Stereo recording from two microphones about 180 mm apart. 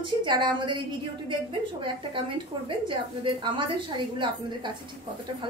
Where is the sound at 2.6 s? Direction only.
25° right (ahead or behind).